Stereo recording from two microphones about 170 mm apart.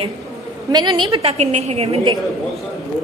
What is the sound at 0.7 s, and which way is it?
A woman's voice, 25° right (ahead or behind).